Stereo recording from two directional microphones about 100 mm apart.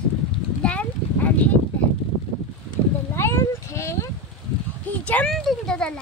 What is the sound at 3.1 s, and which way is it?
Cat, 25° left (ahead or behind).